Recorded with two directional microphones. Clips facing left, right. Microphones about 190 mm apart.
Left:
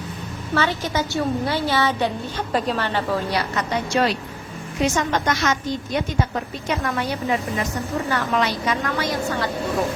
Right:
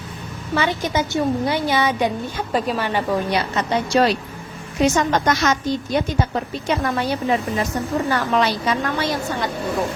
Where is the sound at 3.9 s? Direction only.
35° right (ahead or behind).